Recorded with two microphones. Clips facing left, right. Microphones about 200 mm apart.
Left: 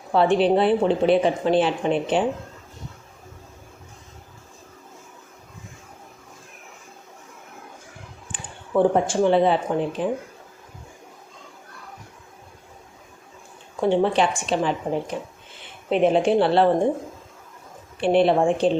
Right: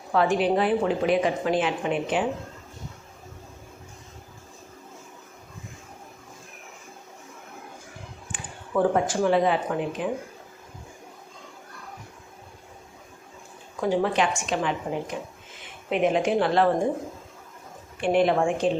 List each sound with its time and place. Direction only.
0.1 s speech: 30° left (ahead or behind)
8.3 s speech: 30° left (ahead or behind)
13.8 s speech: 30° left (ahead or behind)
18.0 s speech: 30° left (ahead or behind)